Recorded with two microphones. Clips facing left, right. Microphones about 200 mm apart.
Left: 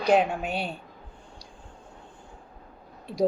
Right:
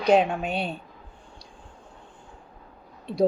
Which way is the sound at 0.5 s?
25° right (ahead or behind).